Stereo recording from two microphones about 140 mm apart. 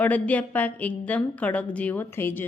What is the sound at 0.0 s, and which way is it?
A woman's voice, 10° left (ahead or behind).